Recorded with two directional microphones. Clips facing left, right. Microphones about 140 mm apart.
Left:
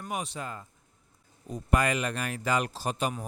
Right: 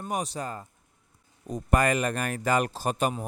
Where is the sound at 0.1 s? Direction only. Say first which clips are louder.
Right 4 dB; 40° right (ahead or behind).